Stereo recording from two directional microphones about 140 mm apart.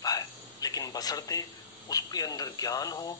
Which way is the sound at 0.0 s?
25° left (ahead or behind).